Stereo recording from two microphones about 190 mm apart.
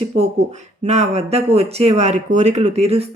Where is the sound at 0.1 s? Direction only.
35° right (ahead or behind).